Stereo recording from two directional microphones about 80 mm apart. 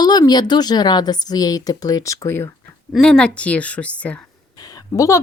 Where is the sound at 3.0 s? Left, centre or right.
Centre.